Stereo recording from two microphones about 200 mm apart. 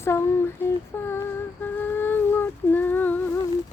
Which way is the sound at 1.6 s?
10° left (ahead or behind).